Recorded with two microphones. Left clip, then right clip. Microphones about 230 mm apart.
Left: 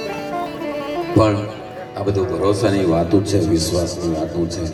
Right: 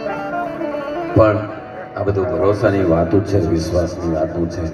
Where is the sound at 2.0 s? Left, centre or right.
Left.